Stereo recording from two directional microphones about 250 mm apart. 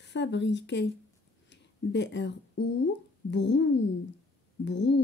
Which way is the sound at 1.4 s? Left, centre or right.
Left.